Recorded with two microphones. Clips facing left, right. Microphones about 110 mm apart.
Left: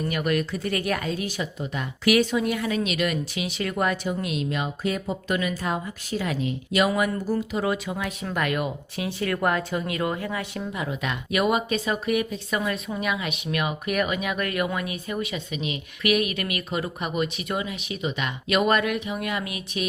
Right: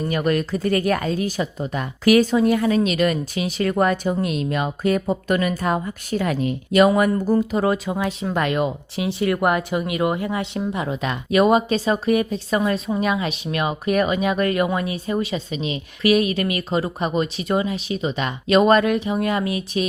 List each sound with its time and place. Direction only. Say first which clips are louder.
0.1 s speech: right 6 dB; 35° right (ahead or behind)
7.9 s speech: right 6 dB; 30° right (ahead or behind)